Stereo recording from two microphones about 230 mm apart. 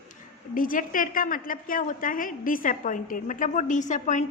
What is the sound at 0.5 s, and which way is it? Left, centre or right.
A woman's voice, left.